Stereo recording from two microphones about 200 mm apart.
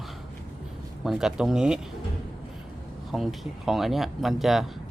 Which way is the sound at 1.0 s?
Centre (ahead or behind).